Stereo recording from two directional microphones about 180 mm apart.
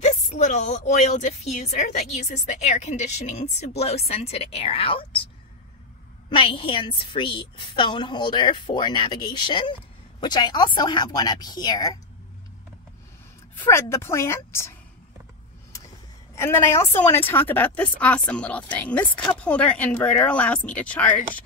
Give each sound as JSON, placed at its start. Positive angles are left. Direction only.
{"t": 0.0, "sound": "a woman's voice", "side_deg": 40}
{"t": 6.3, "sound": "a woman's voice", "side_deg": 30}
{"t": 13.7, "sound": "a woman's voice", "side_deg": 15}
{"t": 16.3, "sound": "a woman's voice", "side_deg": 15}